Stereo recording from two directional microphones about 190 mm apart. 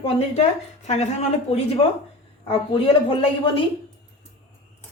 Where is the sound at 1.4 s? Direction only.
30° left (ahead or behind).